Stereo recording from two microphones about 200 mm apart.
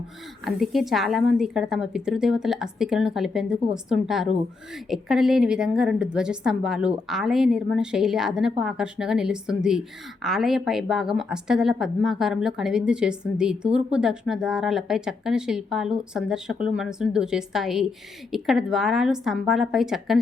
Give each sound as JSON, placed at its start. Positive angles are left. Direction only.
{"t": 0.4, "sound": "a woman's voice", "side_deg": 0}